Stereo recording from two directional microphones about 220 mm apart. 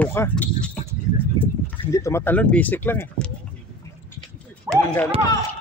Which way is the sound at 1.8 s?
10° left (ahead or behind).